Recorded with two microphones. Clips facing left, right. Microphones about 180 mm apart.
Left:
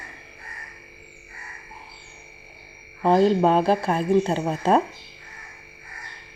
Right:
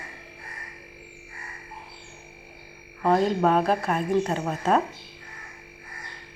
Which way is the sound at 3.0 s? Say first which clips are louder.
Left 4 dB; 30° left (ahead or behind).